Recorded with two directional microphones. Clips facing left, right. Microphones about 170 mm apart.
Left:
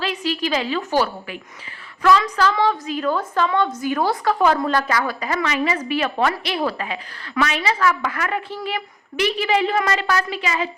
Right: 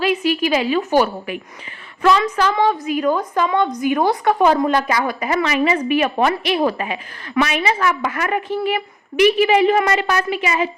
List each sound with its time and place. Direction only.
0.0 s a woman's voice: 15° right (ahead or behind)